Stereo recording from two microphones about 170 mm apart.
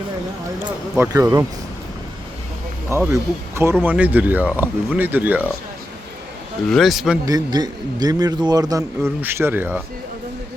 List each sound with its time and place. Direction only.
0.9 s speech: 15° right (ahead or behind)
3.1 s speech: 15° right (ahead or behind)
6.7 s speech: centre (ahead or behind)
7.3 s a man's voice: 20° right (ahead or behind)